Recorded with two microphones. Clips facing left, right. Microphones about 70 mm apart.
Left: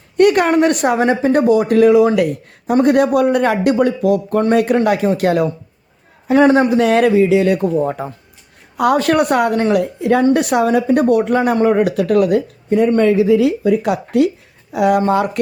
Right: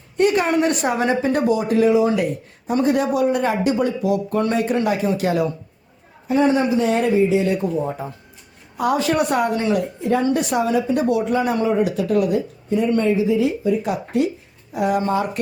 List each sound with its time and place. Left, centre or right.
0.2 s a woman's voice: left
4.5 s speech: left
6.2 s speech: left
9.7 s speech: left